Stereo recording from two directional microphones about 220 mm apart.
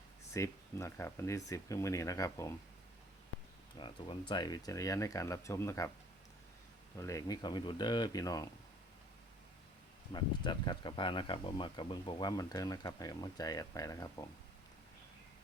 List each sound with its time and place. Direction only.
0.3 s speech: 15° left (ahead or behind)
3.8 s speech: 20° left (ahead or behind)
6.9 s speech: 15° left (ahead or behind)
10.1 s speech: 20° left (ahead or behind)